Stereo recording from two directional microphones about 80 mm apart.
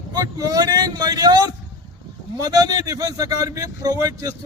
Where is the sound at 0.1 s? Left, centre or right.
Right.